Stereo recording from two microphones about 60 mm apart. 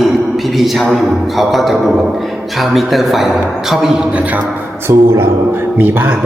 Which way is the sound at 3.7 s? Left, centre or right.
Centre.